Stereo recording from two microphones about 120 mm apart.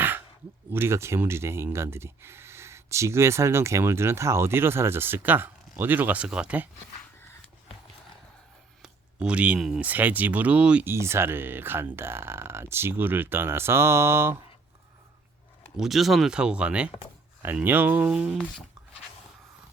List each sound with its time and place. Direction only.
0.7 s speech: 20° right (ahead or behind)
8.8 s speech: 10° right (ahead or behind)
10.9 s speech: 20° right (ahead or behind)
15.8 s speech: centre (ahead or behind)